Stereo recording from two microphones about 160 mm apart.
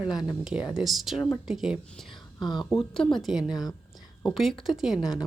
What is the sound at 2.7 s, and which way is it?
A woman's voice, centre (ahead or behind).